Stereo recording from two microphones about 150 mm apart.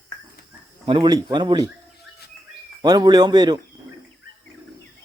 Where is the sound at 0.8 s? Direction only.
30° right (ahead or behind).